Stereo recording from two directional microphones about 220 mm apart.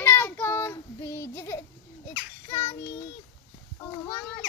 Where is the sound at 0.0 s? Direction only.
10° left (ahead or behind).